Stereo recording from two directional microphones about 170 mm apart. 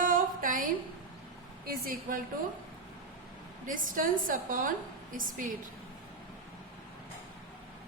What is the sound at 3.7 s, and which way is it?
A woman's voice, 50° right (ahead or behind).